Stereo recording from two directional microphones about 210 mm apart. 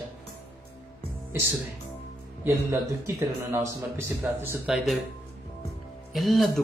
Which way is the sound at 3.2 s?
10° right (ahead or behind).